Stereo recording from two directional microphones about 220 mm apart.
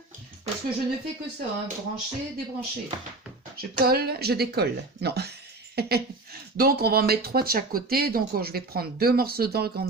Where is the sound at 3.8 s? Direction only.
45° right (ahead or behind).